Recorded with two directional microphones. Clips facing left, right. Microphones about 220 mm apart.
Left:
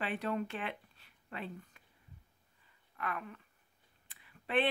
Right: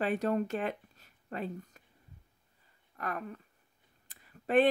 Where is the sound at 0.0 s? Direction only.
45° right (ahead or behind).